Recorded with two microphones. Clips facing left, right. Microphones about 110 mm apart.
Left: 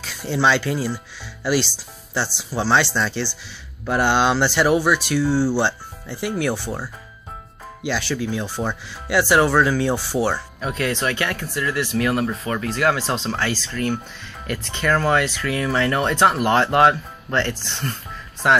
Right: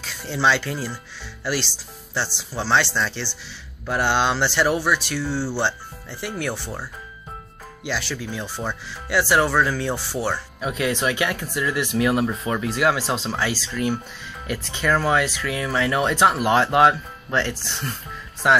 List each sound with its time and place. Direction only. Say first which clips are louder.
0.0 s speech: left 2 dB; centre (ahead or behind)
10.6 s speech: right 1 dB; 10° right (ahead or behind)